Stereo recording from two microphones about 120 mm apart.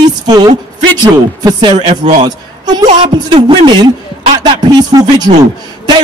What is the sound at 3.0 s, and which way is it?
Speech, 45° right (ahead or behind).